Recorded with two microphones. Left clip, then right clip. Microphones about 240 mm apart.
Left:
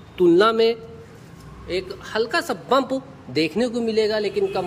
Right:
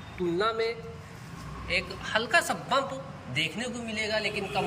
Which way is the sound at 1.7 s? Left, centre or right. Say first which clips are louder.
Left 2 dB; centre.